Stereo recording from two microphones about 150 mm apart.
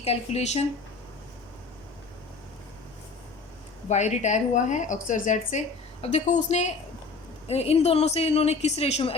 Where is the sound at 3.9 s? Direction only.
50° left (ahead or behind).